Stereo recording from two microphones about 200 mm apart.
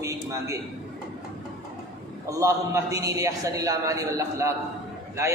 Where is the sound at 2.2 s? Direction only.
15° right (ahead or behind).